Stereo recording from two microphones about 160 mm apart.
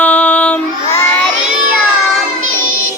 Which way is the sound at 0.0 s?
10° left (ahead or behind).